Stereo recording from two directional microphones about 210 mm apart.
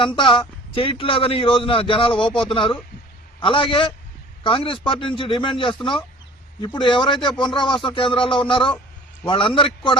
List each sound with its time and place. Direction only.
0.0 s a man's voice: 25° left (ahead or behind)